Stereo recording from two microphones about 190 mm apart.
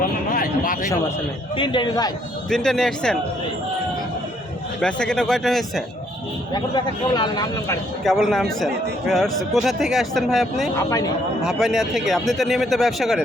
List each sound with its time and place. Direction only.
0.0 s a sound: 50° left (ahead or behind)
1.5 s speech: 25° left (ahead or behind)
2.5 s a man's voice: centre (ahead or behind)
4.8 s a man's voice: 5° left (ahead or behind)
6.5 s speech: 20° left (ahead or behind)
8.0 s a man's voice: centre (ahead or behind)